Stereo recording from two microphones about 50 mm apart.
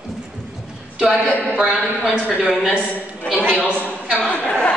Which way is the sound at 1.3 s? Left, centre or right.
Left.